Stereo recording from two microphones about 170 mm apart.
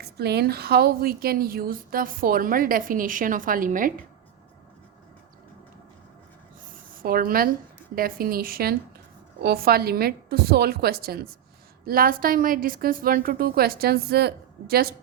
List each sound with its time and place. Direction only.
0.0 s a woman's voice: 70° right (ahead or behind); by 3.9 s 50° right (ahead or behind)
7.0 s a woman's voice: 55° right (ahead or behind)